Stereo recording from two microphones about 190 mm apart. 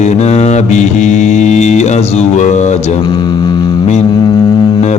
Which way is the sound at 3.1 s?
20° left (ahead or behind).